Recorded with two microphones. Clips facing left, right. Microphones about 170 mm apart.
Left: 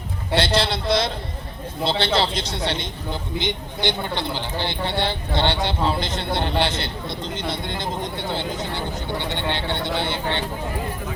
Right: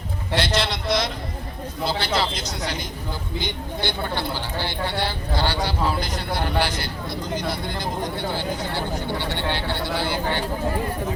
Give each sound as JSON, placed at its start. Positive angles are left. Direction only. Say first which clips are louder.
{"t": 0.3, "sound": "a man's voice", "louder": "left 3 dB", "side_deg": 30}